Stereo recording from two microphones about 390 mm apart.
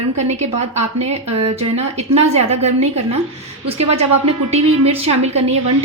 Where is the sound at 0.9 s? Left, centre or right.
Centre.